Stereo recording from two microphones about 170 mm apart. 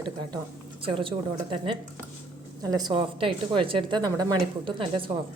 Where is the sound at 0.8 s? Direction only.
30° right (ahead or behind).